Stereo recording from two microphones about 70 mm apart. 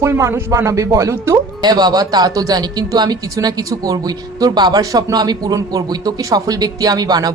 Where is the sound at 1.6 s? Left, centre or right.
Right.